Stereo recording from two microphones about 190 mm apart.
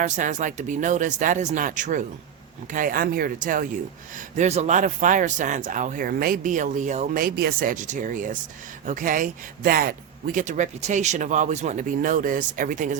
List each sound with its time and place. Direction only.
0.0 s speech: 40° right (ahead or behind)